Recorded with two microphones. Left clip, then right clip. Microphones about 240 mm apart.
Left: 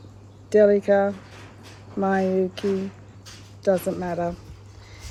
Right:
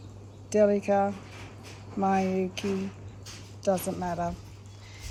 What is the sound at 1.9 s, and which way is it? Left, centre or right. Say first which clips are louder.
Speech: left 5 dB; left.